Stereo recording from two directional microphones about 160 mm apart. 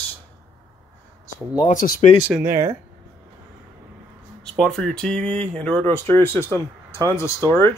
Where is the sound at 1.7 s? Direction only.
55° left (ahead or behind).